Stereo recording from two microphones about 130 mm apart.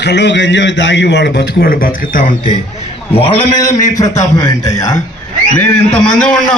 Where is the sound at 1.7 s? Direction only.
90° left.